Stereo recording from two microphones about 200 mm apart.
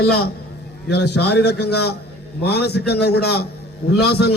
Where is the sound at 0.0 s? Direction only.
55° left (ahead or behind).